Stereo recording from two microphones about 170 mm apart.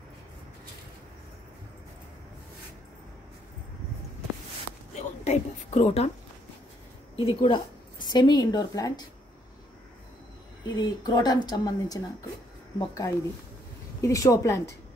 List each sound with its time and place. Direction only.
4.9 s a woman's voice: 40° left (ahead or behind)
7.2 s speech: 35° left (ahead or behind)
10.8 s a woman's voice: 25° left (ahead or behind)